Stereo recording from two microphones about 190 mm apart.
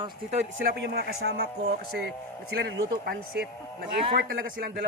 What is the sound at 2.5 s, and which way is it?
Speech, 65° right (ahead or behind).